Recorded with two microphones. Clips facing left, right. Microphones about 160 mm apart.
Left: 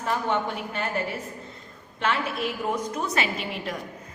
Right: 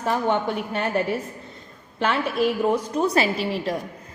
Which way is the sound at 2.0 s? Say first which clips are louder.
Right 5 dB; 35° right (ahead or behind).